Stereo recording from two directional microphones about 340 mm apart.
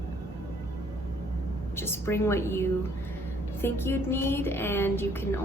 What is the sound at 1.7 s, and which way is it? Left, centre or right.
Speech, centre.